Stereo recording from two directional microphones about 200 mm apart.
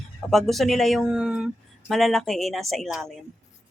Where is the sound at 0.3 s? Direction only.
Centre (ahead or behind).